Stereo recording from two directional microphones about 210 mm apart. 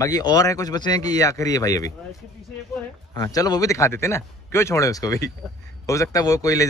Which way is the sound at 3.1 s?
15° left (ahead or behind).